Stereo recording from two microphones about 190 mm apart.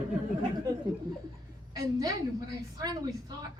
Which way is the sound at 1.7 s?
20° right (ahead or behind).